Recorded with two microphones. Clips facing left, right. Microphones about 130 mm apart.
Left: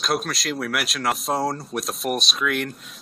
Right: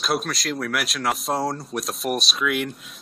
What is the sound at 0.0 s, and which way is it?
Speech, centre (ahead or behind).